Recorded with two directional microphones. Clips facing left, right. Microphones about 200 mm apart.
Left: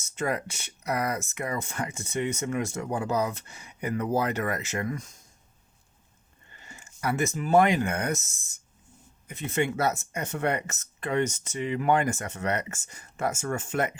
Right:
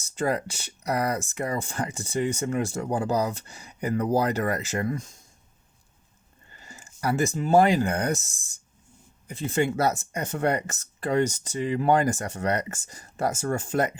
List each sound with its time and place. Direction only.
0.0 s speech: 35° right (ahead or behind)
6.5 s speech: 35° right (ahead or behind)